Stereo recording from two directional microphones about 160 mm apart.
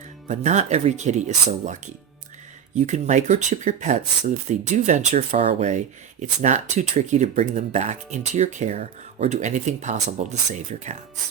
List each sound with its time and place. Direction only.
0.3 s speech: 45° right (ahead or behind)